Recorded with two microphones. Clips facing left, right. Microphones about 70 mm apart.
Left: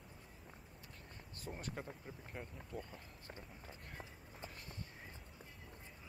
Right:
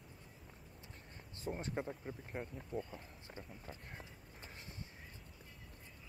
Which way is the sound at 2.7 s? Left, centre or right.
Centre.